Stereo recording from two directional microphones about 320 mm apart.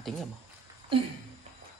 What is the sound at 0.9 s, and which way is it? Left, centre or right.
Speech, centre.